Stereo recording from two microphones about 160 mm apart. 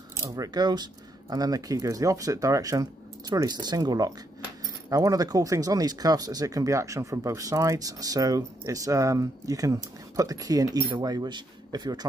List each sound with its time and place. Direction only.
0.2 s speech: 25° right (ahead or behind)